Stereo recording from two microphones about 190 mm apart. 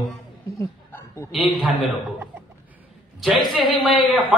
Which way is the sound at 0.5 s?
15° left (ahead or behind).